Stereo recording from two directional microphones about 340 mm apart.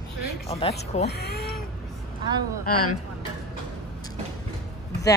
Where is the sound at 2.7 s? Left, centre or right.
Left.